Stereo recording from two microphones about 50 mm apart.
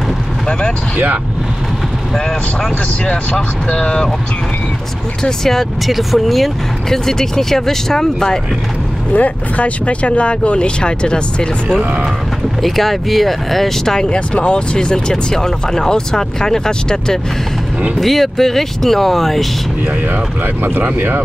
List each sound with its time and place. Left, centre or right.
0.9 s speech: right
3.1 s speech: centre
5.2 s speech: centre
5.9 s speech: centre
9.1 s speech: left
12.6 s speech: centre
20.6 s speech: right